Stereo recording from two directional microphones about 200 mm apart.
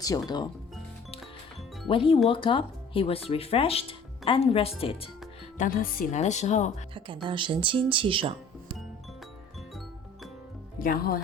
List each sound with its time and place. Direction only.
0.0 s speech: 20° left (ahead or behind)
1.9 s speech: 25° left (ahead or behind)
5.5 s speech: 45° left (ahead or behind)
7.3 s speech: 25° right (ahead or behind)
10.8 s speech: 45° left (ahead or behind)